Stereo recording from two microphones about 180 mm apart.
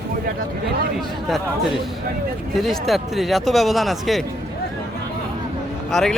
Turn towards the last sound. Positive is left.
turn(degrees=0)  # may be behind; listen again after turning